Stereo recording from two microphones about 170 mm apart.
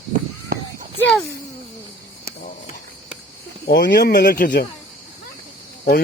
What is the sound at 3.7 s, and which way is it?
Speech, 75° left (ahead or behind).